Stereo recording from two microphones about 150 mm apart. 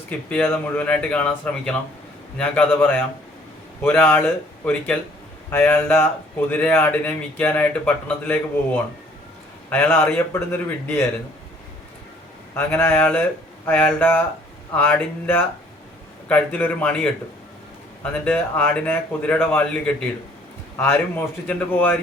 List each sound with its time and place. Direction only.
0.1 s speech: 10° left (ahead or behind)
12.5 s speech: 15° left (ahead or behind)